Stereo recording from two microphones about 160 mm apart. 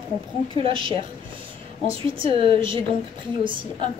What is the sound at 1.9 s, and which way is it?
Speech, 35° right (ahead or behind).